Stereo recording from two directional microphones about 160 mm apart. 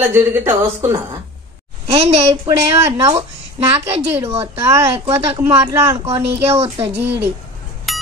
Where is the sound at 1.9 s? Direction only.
35° right (ahead or behind).